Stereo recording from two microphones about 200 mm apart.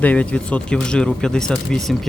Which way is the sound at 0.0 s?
5° left (ahead or behind).